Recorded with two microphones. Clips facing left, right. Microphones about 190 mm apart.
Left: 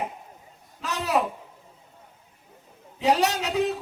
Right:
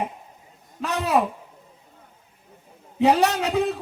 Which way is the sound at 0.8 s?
60° right (ahead or behind).